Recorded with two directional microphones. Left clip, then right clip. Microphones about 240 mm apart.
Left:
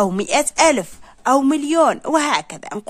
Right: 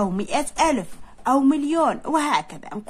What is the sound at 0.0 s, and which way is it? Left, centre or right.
A woman's voice, left.